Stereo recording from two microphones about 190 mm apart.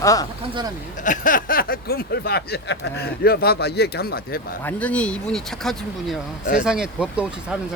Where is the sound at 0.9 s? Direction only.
45° left (ahead or behind).